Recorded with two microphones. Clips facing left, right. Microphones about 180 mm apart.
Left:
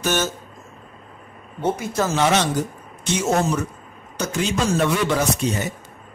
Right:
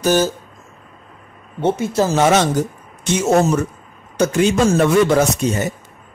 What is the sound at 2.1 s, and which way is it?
Speech, 50° right (ahead or behind).